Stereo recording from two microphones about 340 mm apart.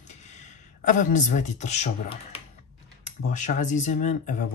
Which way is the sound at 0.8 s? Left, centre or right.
Left.